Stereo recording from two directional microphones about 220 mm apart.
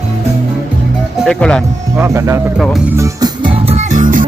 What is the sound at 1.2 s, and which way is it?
Speech, 5° left (ahead or behind).